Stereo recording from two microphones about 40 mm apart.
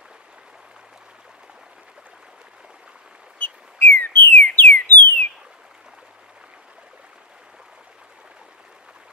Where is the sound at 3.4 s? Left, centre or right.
Left.